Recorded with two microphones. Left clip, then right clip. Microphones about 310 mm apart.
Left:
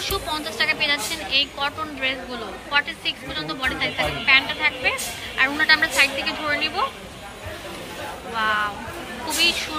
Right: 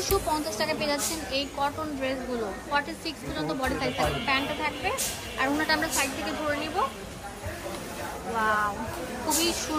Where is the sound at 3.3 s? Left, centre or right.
Centre.